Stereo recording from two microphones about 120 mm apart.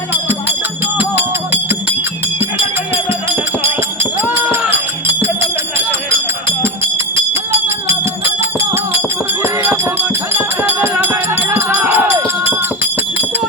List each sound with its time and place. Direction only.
0.1 s music: 20° right (ahead or behind)
4.2 s music: 15° right (ahead or behind)
8.4 s music: 20° right (ahead or behind)